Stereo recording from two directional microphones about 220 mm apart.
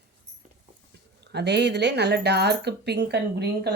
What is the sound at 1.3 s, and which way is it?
Speech, 50° right (ahead or behind).